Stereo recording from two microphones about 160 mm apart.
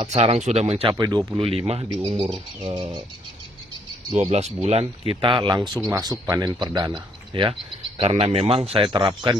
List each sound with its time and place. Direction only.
0.0 s speech: 40° right (ahead or behind); by 3.0 s 20° right (ahead or behind)
4.1 s speech: 45° right (ahead or behind); by 7.5 s 30° right (ahead or behind)
8.0 s speech: 40° right (ahead or behind)